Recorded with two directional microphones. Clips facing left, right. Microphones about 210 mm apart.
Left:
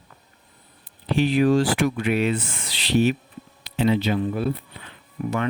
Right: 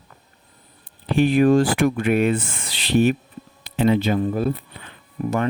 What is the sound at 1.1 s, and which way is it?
Speech, 50° right (ahead or behind).